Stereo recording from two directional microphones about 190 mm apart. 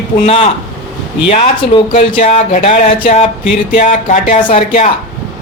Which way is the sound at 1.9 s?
45° left (ahead or behind).